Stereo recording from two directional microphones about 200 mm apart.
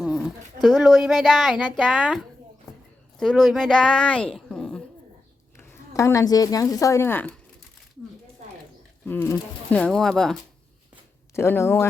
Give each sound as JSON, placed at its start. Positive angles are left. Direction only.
{"t": 0.0, "sound": "speech", "side_deg": -5}
{"t": 5.5, "sound": "a woman's voice", "side_deg": 15}
{"t": 9.0, "sound": "speech", "side_deg": 10}
{"t": 11.3, "sound": "speech", "side_deg": 10}